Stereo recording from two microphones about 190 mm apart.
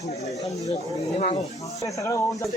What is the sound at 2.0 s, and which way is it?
Speech, 15° left (ahead or behind).